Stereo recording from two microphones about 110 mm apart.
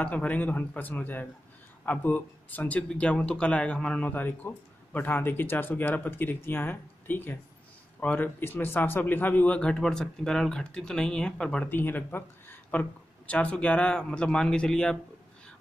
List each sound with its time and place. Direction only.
0.0 s speech: 10° left (ahead or behind)